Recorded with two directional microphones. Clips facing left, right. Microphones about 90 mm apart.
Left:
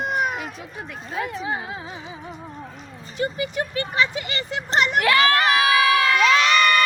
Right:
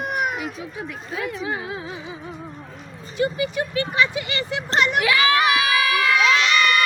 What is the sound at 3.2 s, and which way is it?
Speech, 30° left (ahead or behind).